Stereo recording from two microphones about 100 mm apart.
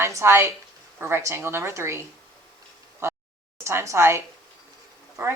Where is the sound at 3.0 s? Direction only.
30° right (ahead or behind).